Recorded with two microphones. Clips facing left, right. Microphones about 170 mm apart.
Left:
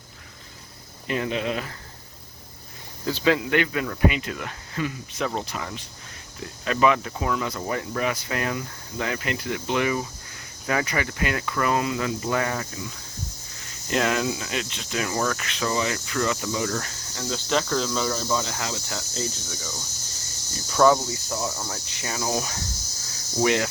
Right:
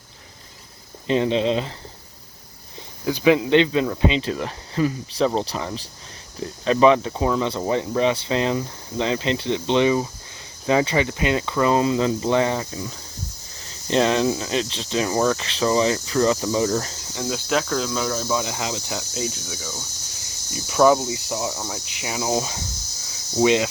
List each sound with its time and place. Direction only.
1.0 s speech: 25° right (ahead or behind)
3.1 s speech: 15° right (ahead or behind)
17.2 s speech: 10° right (ahead or behind)